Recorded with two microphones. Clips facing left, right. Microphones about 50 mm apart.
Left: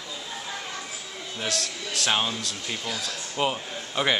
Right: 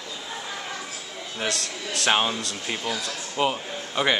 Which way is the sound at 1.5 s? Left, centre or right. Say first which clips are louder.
Right 1 dB; right.